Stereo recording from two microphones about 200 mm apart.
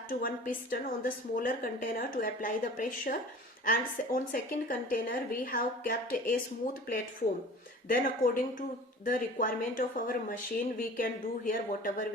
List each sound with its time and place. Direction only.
0.1 s a woman's voice: 45° left (ahead or behind)
7.9 s a woman's voice: 45° left (ahead or behind)